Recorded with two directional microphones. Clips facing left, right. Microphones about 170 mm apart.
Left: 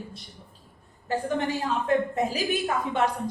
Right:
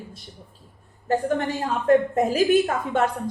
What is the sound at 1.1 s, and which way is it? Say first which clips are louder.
A woman's voice: right 4 dB; 45° right (ahead or behind).